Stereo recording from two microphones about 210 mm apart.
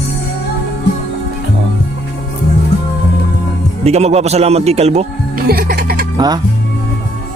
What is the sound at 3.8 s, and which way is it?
Speech, 30° right (ahead or behind).